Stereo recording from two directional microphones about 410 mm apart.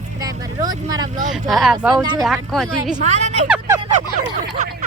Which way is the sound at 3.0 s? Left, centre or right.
Centre.